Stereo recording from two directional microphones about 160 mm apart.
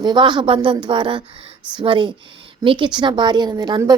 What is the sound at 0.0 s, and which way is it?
A woman's voice, 30° right (ahead or behind).